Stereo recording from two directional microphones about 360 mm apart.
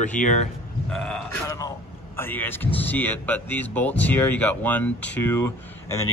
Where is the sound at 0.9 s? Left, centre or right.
Centre.